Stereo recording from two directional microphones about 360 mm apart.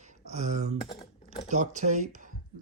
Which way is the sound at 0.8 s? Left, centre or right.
Centre.